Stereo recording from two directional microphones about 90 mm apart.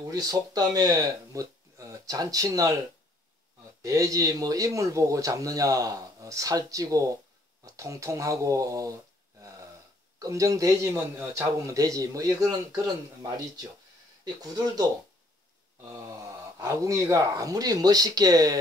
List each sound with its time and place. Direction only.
0.0 s speech: 45° right (ahead or behind)
3.8 s speech: 40° right (ahead or behind)
10.1 s speech: 40° right (ahead or behind)
14.2 s speech: 45° right (ahead or behind)
16.1 s speech: 40° right (ahead or behind)